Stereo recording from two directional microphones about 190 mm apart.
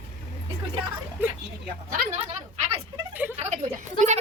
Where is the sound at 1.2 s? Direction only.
10° right (ahead or behind).